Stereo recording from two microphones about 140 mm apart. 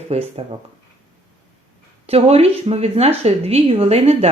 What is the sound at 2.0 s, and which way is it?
Speech, 45° right (ahead or behind).